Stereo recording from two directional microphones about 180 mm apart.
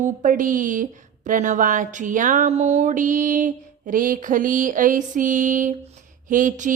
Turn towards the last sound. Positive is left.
turn(degrees=-45)  # may be behind; listen again after turning